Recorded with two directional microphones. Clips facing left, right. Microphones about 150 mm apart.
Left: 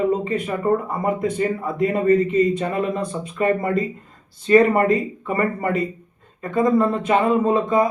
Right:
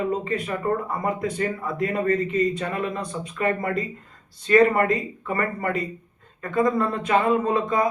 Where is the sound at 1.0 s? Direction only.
25° left (ahead or behind).